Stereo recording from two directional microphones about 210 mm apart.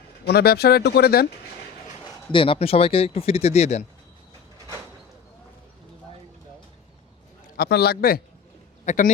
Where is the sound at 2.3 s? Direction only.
25° left (ahead or behind).